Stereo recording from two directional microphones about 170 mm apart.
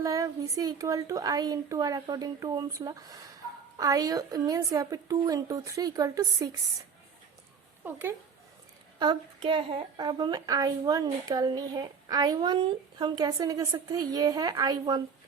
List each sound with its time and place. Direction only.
0.0 s a woman's voice: 20° right (ahead or behind)
7.9 s speech: 10° right (ahead or behind)
9.0 s a woman's voice: 25° right (ahead or behind)